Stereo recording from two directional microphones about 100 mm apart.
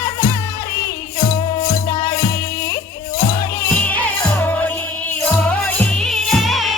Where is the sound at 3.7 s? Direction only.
15° left (ahead or behind).